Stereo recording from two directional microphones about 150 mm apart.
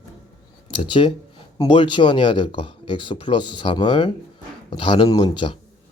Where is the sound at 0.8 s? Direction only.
35° left (ahead or behind).